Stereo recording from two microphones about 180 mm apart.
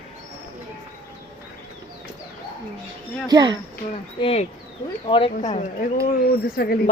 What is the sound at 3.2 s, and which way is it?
Speech, 20° right (ahead or behind).